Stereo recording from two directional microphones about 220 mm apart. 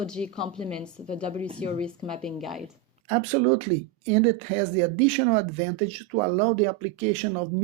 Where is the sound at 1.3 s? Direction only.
25° right (ahead or behind).